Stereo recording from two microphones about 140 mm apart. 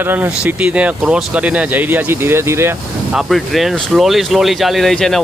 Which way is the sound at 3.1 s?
Centre (ahead or behind).